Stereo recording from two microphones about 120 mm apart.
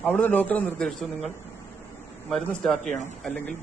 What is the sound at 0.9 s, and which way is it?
A man's voice, centre (ahead or behind).